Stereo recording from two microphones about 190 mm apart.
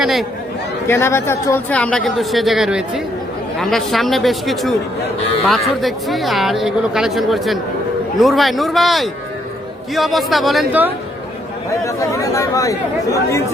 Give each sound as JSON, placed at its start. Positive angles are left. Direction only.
{"t": 0.0, "sound": "speech", "side_deg": 0}
{"t": 0.9, "sound": "speech", "side_deg": 15}
{"t": 11.9, "sound": "speech", "side_deg": 15}